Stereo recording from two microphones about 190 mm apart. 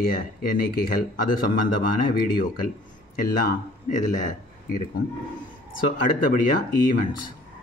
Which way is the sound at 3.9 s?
40° left (ahead or behind).